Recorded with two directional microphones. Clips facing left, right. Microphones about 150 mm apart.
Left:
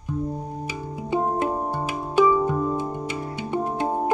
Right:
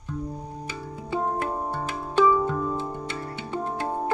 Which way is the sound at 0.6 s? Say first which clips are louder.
Left 4 dB; 15° left (ahead or behind).